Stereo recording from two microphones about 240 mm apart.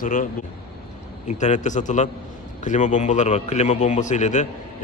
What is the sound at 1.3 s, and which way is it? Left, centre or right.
A man's voice, left.